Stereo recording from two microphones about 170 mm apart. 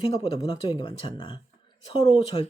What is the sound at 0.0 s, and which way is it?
Speech, 30° left (ahead or behind).